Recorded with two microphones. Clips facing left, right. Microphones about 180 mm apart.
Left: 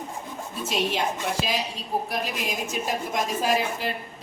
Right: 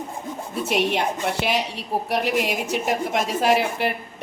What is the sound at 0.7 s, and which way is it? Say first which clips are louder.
A woman's voice: right 4 dB; 65° right (ahead or behind).